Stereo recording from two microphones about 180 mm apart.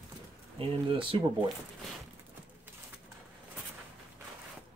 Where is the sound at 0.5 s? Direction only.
30° right (ahead or behind).